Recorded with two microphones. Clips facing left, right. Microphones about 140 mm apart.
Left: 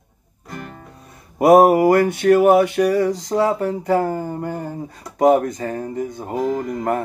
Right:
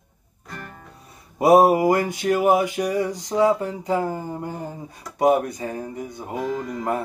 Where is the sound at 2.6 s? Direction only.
15° right (ahead or behind).